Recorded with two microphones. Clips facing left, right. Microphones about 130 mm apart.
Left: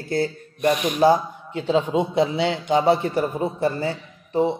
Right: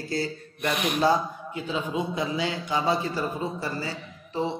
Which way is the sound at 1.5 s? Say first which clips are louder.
Left 10 dB; 30° left (ahead or behind).